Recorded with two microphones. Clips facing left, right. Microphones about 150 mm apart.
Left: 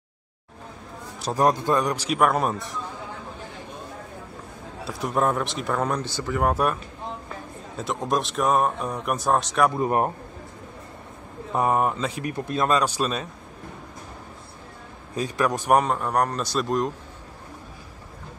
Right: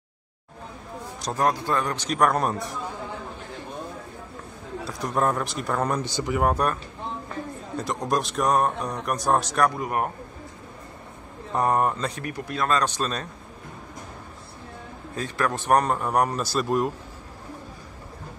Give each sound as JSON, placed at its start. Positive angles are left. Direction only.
{"t": 1.2, "sound": "speech", "side_deg": 15}
{"t": 4.8, "sound": "speech", "side_deg": 5}
{"t": 6.0, "sound": "speech", "side_deg": -15}
{"t": 6.4, "sound": "speech", "side_deg": 5}
{"t": 9.8, "sound": "speech", "side_deg": 30}
{"t": 11.5, "sound": "speech", "side_deg": 5}
{"t": 12.2, "sound": "speech", "side_deg": 20}
{"t": 12.7, "sound": "speech", "side_deg": 10}
{"t": 15.1, "sound": "speech", "side_deg": 15}
{"t": 15.8, "sound": "speech", "side_deg": 0}